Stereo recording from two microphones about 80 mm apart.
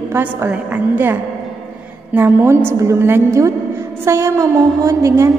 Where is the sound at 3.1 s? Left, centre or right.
Right.